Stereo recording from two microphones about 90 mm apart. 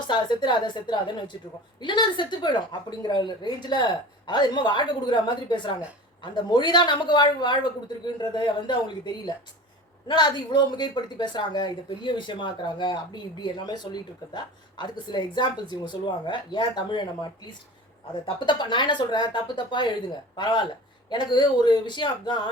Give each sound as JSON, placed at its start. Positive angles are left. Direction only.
{"t": 0.1, "sound": "speech", "side_deg": 60}
{"t": 11.9, "sound": "speech", "side_deg": 65}
{"t": 18.3, "sound": "speech", "side_deg": 60}